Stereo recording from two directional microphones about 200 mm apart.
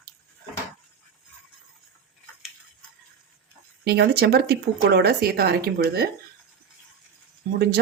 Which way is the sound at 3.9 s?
55° right (ahead or behind).